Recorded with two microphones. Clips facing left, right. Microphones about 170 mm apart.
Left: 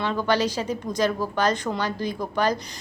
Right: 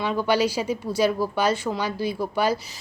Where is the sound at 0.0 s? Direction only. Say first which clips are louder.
Right 1 dB; 10° right (ahead or behind).